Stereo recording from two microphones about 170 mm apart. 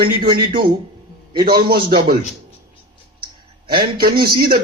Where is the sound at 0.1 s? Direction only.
60° right (ahead or behind).